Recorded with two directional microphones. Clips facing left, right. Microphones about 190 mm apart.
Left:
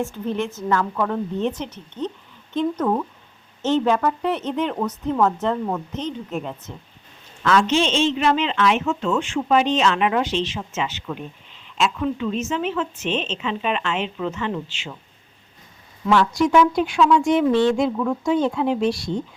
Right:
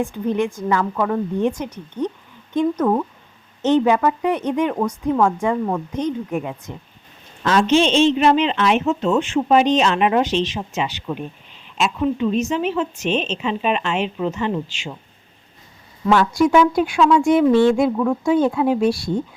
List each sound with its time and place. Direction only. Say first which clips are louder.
0.0 s a woman's voice: right 4 dB; 15° right (ahead or behind)
7.4 s a woman's voice: right 3 dB; 25° right (ahead or behind)
16.0 s a woman's voice: right 2 dB; 5° right (ahead or behind)